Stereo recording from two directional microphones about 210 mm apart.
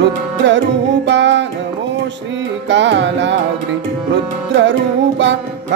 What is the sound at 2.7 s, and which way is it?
Music, 60° right (ahead or behind).